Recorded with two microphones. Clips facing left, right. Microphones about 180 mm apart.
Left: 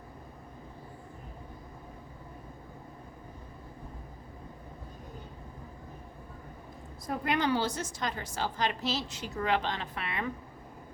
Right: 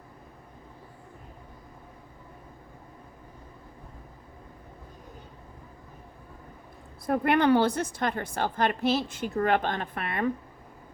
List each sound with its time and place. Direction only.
7.1 s a woman's voice: 60° right (ahead or behind)